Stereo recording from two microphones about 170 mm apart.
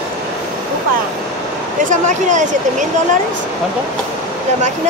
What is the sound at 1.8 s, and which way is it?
Speech, 45° right (ahead or behind).